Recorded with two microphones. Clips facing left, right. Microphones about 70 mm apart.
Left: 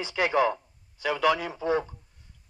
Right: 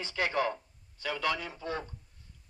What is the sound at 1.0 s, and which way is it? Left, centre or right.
Speech, left.